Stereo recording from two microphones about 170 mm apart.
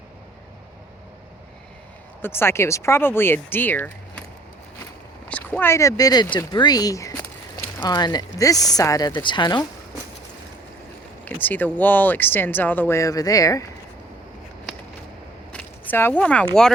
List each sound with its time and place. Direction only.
2.2 s speech: 15° left (ahead or behind)
5.3 s speech: 10° left (ahead or behind)
11.3 s speech: 10° left (ahead or behind)
15.5 s a sound: 10° left (ahead or behind)